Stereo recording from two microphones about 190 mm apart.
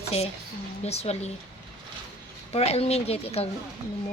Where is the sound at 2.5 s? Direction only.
30° left (ahead or behind).